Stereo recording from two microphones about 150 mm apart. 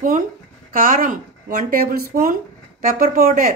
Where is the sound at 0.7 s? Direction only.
70° right (ahead or behind).